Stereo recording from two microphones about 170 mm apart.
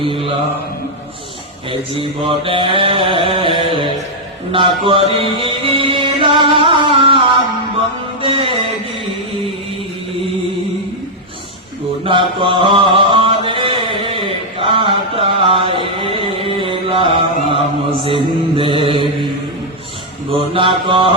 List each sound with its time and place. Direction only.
0.0 s mantra: 30° right (ahead or behind)
1.7 s mantra: 30° right (ahead or behind)
4.5 s music: 30° right (ahead or behind)
8.2 s music: 30° right (ahead or behind)
12.0 s mantra: 30° right (ahead or behind)
14.6 s chant: 30° right (ahead or behind)
16.6 s music: 30° right (ahead or behind)
18.0 s mantra: 30° right (ahead or behind)
20.3 s mantra: 30° right (ahead or behind)